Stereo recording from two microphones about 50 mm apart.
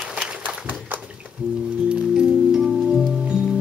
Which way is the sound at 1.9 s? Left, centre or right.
Centre.